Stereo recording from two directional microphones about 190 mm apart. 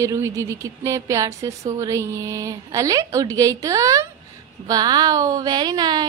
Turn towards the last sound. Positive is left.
turn(degrees=-20)  # may be behind; listen again after turning